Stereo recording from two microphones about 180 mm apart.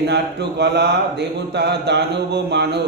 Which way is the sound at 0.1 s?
70° right (ahead or behind).